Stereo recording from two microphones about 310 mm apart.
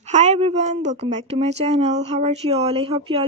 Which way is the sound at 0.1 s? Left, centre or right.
Right.